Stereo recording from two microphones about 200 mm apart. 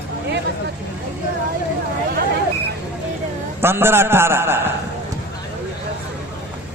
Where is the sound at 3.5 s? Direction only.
10° right (ahead or behind).